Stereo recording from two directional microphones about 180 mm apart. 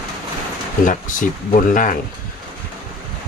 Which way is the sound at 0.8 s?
50° left (ahead or behind).